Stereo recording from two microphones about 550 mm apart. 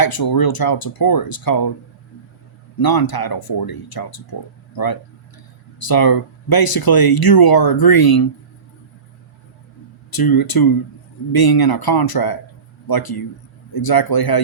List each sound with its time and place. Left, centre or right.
0.0 s speech: left
2.7 s speech: left
10.1 s speech: left